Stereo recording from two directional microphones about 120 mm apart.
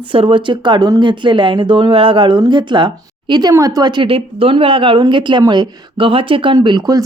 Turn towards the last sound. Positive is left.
turn(degrees=-35)  # may be behind; listen again after turning